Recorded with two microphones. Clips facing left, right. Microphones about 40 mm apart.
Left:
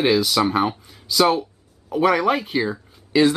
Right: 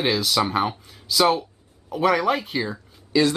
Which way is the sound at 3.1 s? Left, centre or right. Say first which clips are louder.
Left 3 dB; left.